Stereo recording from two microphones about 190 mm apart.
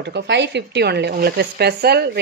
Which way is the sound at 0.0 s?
65° right (ahead or behind).